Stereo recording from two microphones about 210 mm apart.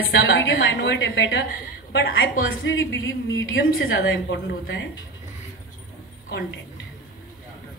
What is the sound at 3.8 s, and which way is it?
A woman's voice, 60° left (ahead or behind).